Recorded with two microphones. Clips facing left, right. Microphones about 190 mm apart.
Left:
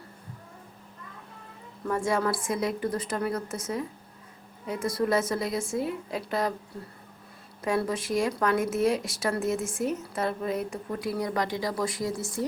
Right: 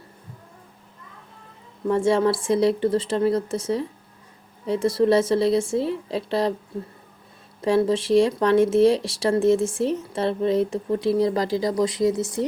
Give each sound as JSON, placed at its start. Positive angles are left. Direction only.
{"t": 1.9, "sound": "speech", "side_deg": -25}
{"t": 7.6, "sound": "speech", "side_deg": -25}
{"t": 11.7, "sound": "speech", "side_deg": -20}